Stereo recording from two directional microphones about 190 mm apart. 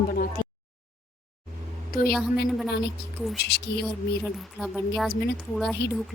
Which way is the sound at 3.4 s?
60° left (ahead or behind).